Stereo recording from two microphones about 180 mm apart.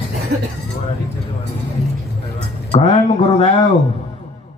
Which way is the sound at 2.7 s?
35° left (ahead or behind).